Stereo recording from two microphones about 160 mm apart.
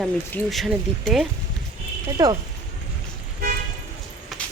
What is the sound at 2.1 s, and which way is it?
Speech, 25° right (ahead or behind).